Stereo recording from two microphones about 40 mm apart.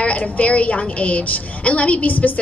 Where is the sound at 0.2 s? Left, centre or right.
Left.